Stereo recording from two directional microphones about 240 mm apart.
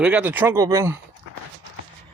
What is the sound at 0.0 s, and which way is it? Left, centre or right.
Speech, centre.